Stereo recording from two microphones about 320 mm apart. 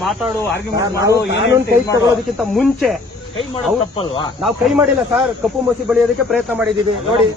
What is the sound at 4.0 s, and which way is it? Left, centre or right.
Speech, centre.